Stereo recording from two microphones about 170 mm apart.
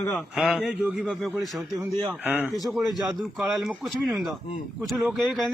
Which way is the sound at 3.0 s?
Centre (ahead or behind).